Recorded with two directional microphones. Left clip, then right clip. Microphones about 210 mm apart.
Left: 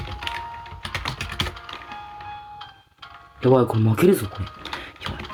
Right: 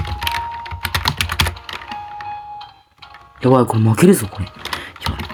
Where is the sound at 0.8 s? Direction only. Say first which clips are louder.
Right 10 dB; 50° right (ahead or behind).